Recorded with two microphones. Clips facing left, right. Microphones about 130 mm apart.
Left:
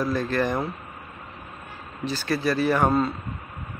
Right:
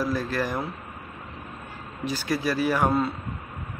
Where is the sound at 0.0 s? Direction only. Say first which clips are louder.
Left 2 dB; 5° right (ahead or behind).